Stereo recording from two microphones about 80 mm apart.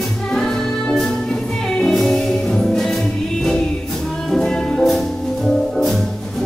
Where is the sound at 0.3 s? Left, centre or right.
Centre.